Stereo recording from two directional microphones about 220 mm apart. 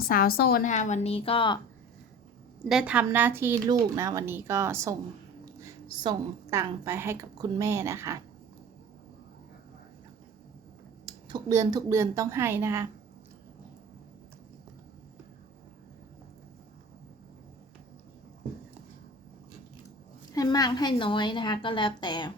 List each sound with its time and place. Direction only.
0.1 s a woman's voice: 40° left (ahead or behind); by 1.5 s 25° left (ahead or behind)
2.6 s a woman's voice: 5° right (ahead or behind)
11.0 s a woman's voice: 20° right (ahead or behind)
20.3 s a woman's voice: 15° left (ahead or behind)